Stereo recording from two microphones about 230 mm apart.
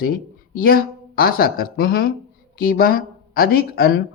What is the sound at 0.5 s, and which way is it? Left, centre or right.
Speech, left.